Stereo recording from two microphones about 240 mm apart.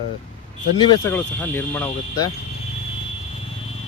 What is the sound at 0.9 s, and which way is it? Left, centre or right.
Speech, centre.